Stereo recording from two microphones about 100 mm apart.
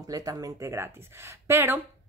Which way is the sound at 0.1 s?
40° right (ahead or behind).